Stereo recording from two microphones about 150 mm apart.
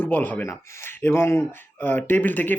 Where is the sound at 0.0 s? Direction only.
10° left (ahead or behind).